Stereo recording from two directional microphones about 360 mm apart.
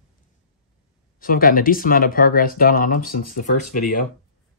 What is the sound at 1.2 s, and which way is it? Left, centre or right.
Speech, left.